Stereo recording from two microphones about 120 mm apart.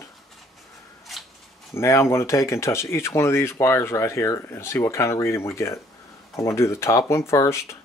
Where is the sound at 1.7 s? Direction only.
25° left (ahead or behind).